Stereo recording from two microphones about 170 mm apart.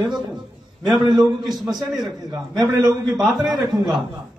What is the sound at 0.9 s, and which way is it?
Speech, 25° right (ahead or behind).